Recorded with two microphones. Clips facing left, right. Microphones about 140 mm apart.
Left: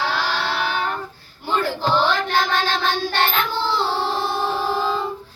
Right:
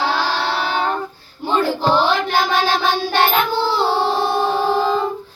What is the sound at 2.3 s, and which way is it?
Child singing, 10° right (ahead or behind).